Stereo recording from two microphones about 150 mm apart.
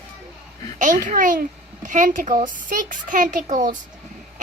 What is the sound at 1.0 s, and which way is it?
A child's voice, 65° right (ahead or behind).